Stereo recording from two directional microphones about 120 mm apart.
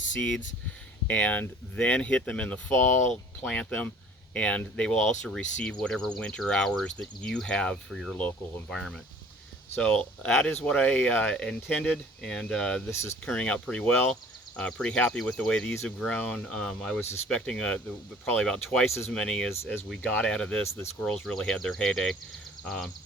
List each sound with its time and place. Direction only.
0.2 s speech: 10° left (ahead or behind)
3.1 s speech: 10° left (ahead or behind)
12.9 s speech: 20° left (ahead or behind)
13.2 s speech: 10° left (ahead or behind)
18.9 s speech: 20° left (ahead or behind)
19.1 s speech: 5° left (ahead or behind)